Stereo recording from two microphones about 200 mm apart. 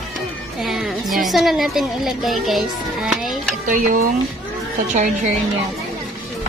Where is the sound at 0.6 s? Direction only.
Centre (ahead or behind).